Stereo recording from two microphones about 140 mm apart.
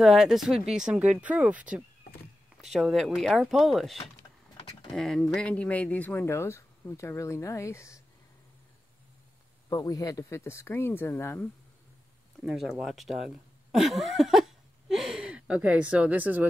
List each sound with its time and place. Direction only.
0.0 s speech: centre (ahead or behind); by 8.0 s 20° left (ahead or behind)
9.7 s speech: 25° left (ahead or behind)
12.4 s speech: centre (ahead or behind)